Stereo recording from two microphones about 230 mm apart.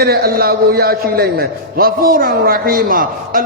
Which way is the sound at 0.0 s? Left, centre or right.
Right.